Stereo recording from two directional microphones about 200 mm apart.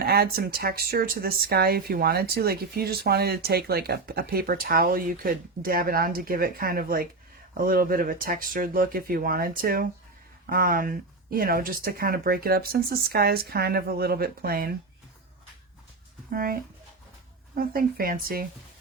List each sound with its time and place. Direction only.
0.0 s speech: 50° right (ahead or behind)
16.3 s speech: 45° right (ahead or behind)